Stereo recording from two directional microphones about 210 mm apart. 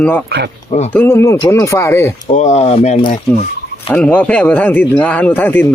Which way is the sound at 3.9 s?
10° left (ahead or behind).